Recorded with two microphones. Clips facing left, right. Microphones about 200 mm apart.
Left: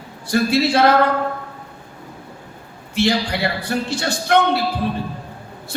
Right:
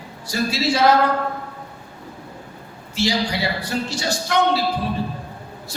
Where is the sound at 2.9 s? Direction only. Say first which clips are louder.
Left 3 dB; 55° left (ahead or behind).